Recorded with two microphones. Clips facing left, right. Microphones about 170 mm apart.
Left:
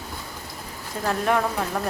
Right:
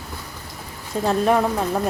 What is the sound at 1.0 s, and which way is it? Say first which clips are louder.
Speech: right 4 dB; 20° right (ahead or behind).